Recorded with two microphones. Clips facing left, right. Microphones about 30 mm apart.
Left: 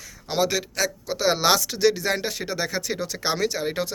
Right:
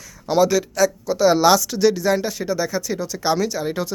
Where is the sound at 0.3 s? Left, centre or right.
Left.